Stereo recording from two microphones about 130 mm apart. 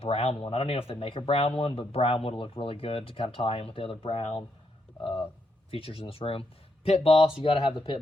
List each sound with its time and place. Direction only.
0.0 s speech: 50° left (ahead or behind)
5.7 s speech: 45° left (ahead or behind)